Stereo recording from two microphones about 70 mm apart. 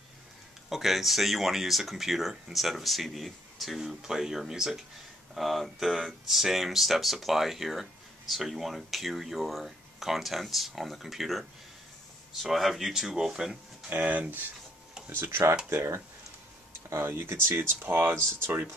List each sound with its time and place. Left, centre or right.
0.7 s speech: centre
13.8 s speech: right
15.0 s speech: right